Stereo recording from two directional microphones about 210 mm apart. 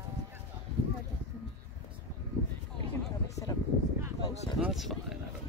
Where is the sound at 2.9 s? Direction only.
15° left (ahead or behind).